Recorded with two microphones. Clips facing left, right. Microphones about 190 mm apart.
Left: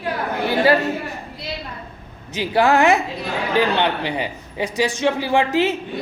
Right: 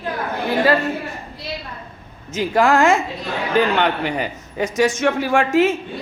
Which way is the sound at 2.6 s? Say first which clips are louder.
Even; 20° left (ahead or behind).